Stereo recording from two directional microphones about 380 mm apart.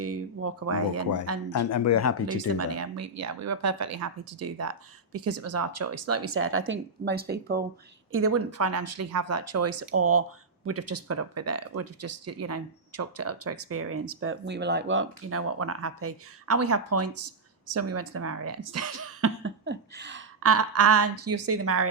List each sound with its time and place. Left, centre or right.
0.0 s speech: right
1.5 s speech: left
2.6 s speech: right
8.1 s speech: right